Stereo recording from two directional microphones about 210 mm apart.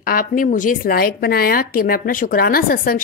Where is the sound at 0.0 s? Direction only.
45° left (ahead or behind).